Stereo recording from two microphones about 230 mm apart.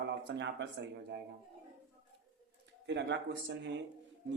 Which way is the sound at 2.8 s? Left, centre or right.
Right.